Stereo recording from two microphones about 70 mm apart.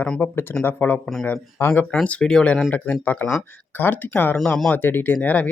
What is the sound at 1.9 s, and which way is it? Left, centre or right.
Speech, centre.